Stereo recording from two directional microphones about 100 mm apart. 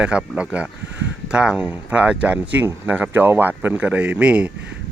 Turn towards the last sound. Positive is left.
turn(degrees=-10)  # may be behind; listen again after turning